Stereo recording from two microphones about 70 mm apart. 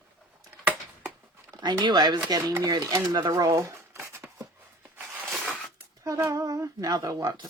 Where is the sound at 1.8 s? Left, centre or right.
Right.